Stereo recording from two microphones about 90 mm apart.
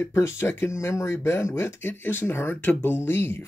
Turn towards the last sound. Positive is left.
turn(degrees=25)  # may be behind; listen again after turning